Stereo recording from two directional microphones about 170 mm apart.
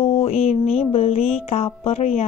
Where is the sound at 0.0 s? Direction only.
35° left (ahead or behind).